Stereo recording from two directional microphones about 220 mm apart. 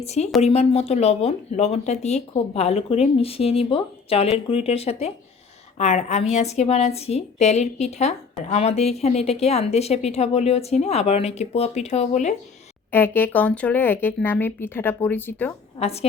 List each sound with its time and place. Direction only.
0.0 s a woman's voice: 30° left (ahead or behind)
12.9 s speech: 10° left (ahead or behind)
15.8 s a woman's voice: 30° left (ahead or behind)